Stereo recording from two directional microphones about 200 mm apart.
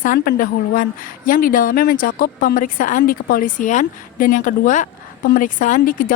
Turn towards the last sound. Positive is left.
turn(degrees=45)  # may be behind; listen again after turning